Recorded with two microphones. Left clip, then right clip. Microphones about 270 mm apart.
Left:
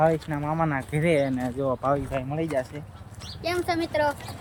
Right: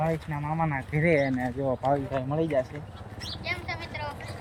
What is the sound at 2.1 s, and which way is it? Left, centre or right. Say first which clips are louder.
Speech: even; centre.